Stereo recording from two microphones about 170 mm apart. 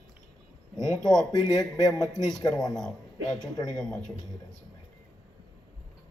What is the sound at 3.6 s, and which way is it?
Speech, 5° left (ahead or behind).